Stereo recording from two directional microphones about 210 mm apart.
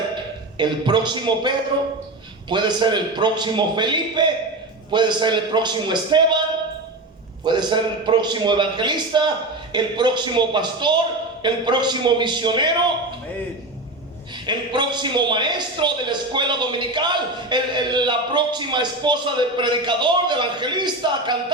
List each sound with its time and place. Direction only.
0.5 s a man's voice: 20° right (ahead or behind)
7.4 s a man's voice: 20° right (ahead or behind)
14.4 s a man's voice: 20° right (ahead or behind)